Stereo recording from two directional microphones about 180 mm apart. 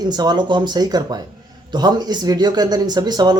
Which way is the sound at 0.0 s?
25° right (ahead or behind).